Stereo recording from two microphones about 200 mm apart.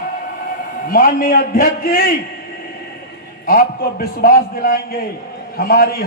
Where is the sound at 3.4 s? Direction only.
45° left (ahead or behind).